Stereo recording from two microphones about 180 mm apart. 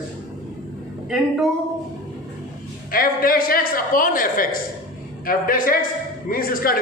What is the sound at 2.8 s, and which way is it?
A woman's voice, 55° left (ahead or behind).